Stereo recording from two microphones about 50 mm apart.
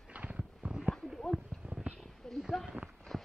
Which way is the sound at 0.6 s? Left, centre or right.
Centre.